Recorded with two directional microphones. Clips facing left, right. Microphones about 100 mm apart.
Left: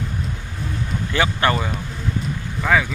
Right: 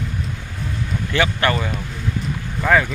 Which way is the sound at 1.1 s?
25° left (ahead or behind).